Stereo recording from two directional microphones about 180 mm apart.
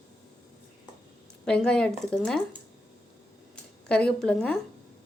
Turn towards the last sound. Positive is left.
turn(degrees=5)  # may be behind; listen again after turning